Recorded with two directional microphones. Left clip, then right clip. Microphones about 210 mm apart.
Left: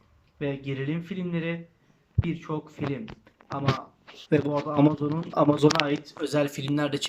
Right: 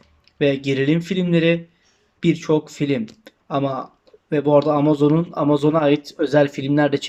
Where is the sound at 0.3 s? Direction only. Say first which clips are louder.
Right 13 dB; 45° right (ahead or behind).